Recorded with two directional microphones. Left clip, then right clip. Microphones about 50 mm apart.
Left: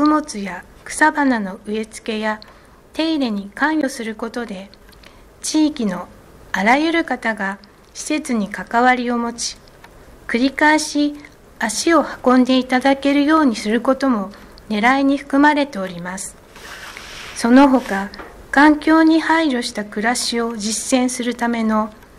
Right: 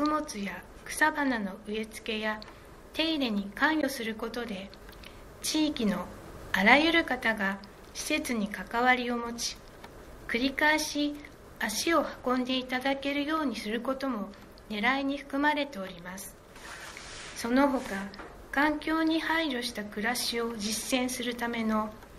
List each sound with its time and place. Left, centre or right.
0.0 s a woman's voice: left
16.5 s a sound: centre
17.6 s speech: centre
18.5 s a woman's voice: left